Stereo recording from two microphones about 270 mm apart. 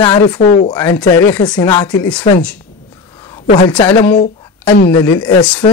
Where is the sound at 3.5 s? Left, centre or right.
Centre.